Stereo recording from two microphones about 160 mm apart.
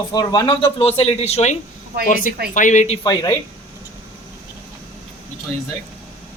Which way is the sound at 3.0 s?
25° left (ahead or behind).